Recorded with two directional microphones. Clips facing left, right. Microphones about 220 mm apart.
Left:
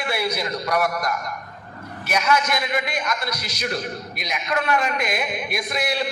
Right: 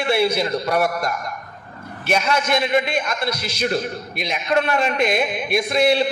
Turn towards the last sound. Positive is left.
turn(degrees=-25)  # may be behind; listen again after turning